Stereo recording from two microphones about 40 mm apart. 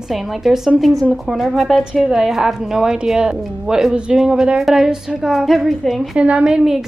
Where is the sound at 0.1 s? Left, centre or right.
Centre.